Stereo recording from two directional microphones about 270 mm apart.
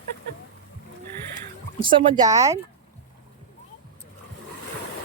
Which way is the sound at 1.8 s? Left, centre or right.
Centre.